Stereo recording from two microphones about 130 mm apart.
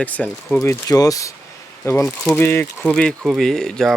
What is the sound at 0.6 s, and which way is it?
Speech, 25° left (ahead or behind).